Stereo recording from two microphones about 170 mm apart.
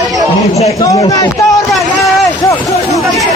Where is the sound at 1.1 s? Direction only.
20° left (ahead or behind).